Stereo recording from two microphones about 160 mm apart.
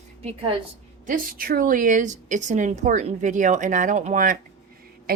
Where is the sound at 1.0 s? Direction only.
60° right (ahead or behind).